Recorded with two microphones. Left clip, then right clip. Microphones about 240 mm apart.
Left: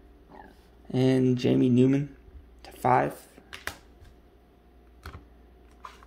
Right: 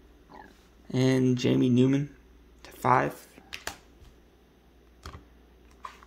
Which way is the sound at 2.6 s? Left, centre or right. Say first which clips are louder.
Left 1 dB; centre.